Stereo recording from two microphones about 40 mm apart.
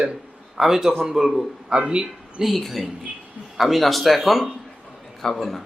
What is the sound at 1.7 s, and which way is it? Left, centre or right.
Speech, right.